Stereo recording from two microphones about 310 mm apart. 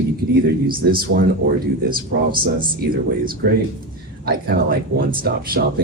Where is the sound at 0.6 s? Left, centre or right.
Right.